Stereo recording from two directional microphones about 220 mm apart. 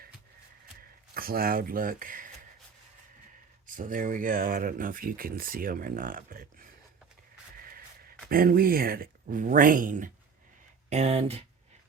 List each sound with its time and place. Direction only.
1.1 s speech: 40° right (ahead or behind)
3.7 s speech: 40° right (ahead or behind)
8.3 s speech: 40° right (ahead or behind)